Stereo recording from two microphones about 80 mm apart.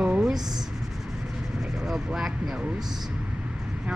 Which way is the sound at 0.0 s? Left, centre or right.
Centre.